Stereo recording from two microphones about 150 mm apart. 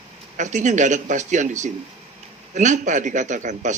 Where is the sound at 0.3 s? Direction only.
55° right (ahead or behind).